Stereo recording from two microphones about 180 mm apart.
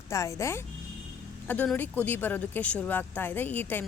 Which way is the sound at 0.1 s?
15° left (ahead or behind).